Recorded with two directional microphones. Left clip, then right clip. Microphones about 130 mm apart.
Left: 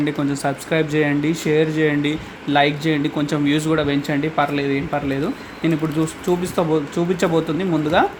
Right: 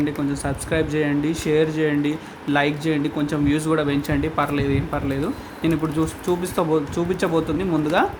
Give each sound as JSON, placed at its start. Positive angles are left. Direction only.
{"t": 0.0, "sound": "speech", "side_deg": 25}